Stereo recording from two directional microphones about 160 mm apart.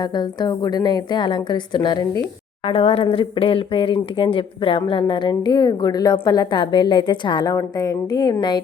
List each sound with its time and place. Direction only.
0.0 s speech: 25° left (ahead or behind)